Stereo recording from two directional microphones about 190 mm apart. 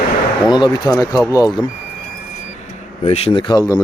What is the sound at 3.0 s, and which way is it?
Speech, 30° left (ahead or behind).